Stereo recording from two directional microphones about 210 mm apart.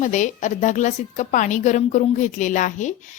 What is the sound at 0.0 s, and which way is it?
A woman's voice, 35° left (ahead or behind).